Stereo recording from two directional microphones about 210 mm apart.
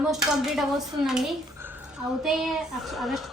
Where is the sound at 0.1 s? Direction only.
Centre (ahead or behind).